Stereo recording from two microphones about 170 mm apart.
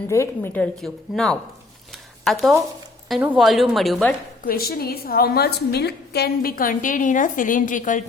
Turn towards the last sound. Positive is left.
turn(degrees=50)  # may be behind; listen again after turning